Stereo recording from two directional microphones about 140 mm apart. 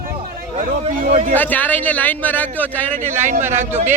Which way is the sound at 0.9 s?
75° right (ahead or behind).